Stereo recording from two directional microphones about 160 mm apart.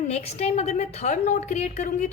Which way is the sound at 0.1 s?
40° left (ahead or behind).